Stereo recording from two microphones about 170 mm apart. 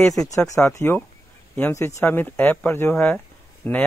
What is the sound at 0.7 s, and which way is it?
Speech, 15° left (ahead or behind).